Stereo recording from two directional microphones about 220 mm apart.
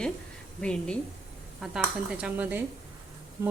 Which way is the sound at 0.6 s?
5° left (ahead or behind).